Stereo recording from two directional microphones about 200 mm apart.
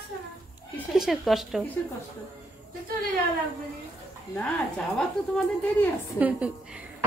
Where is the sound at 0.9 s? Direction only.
Centre (ahead or behind).